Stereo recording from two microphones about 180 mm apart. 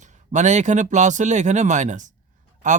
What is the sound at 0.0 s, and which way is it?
A man's voice, 40° right (ahead or behind).